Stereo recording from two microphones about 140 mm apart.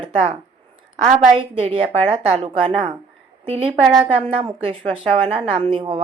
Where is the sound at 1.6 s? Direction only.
40° right (ahead or behind).